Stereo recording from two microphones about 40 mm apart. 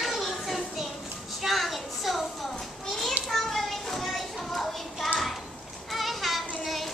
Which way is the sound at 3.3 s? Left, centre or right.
Centre.